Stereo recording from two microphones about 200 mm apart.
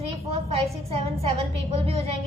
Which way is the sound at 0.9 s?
30° right (ahead or behind).